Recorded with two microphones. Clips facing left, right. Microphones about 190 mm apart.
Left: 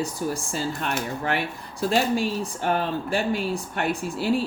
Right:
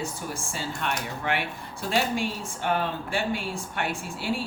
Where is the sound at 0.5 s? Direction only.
40° left (ahead or behind).